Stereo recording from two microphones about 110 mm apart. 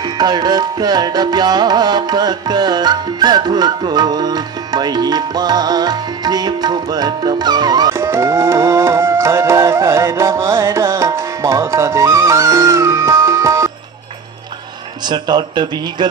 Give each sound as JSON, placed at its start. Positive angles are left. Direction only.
{"t": 0.0, "sound": "music", "side_deg": -40}
{"t": 7.9, "sound": "music", "side_deg": -25}
{"t": 15.0, "sound": "music", "side_deg": -40}